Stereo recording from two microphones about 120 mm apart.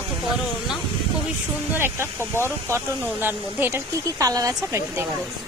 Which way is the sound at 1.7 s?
20° right (ahead or behind).